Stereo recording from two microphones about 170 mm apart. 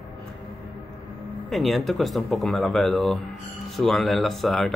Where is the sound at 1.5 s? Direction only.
Centre (ahead or behind).